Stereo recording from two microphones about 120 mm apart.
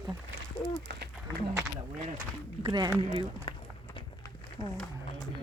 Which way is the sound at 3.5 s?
40° left (ahead or behind).